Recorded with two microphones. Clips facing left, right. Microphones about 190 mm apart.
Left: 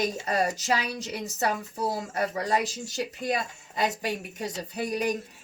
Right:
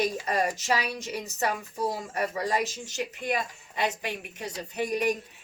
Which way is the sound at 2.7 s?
35° left (ahead or behind).